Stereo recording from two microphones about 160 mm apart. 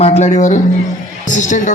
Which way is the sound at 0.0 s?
45° left (ahead or behind).